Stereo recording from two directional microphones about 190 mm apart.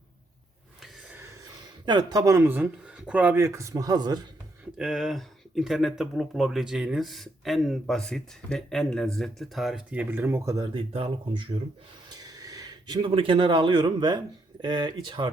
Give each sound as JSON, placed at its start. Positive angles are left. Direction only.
{"t": 1.8, "sound": "speech", "side_deg": -25}
{"t": 4.8, "sound": "speech", "side_deg": 0}